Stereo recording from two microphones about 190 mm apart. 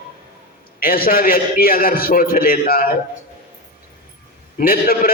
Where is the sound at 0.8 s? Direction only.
50° left (ahead or behind).